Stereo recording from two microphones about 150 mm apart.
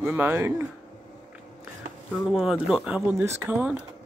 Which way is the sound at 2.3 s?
5° right (ahead or behind).